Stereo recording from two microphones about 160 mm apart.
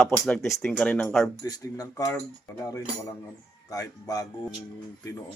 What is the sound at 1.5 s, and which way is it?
Speech, 20° left (ahead or behind).